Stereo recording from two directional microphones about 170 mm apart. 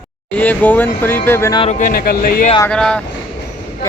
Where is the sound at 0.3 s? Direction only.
10° left (ahead or behind).